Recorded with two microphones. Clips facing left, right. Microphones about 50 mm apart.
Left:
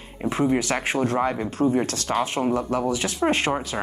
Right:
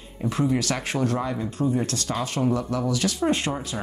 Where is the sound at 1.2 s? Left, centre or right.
Left.